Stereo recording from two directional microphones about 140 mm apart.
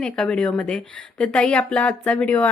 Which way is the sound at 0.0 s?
5° left (ahead or behind).